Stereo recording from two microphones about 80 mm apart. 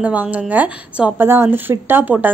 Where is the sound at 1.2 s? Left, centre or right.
Right.